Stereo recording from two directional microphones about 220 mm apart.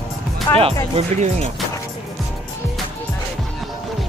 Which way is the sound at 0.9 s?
30° right (ahead or behind).